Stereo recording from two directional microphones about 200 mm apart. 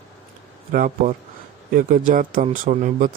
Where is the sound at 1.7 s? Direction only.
40° right (ahead or behind).